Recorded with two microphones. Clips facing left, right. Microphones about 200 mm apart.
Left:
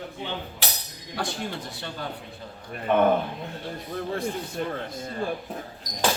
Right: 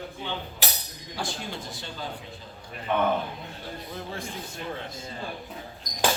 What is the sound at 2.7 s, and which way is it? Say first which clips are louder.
Speech: left 5 dB; 50° left (ahead or behind).